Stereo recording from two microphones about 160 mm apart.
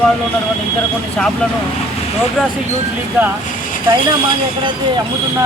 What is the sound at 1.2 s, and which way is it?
Speech, 5° left (ahead or behind).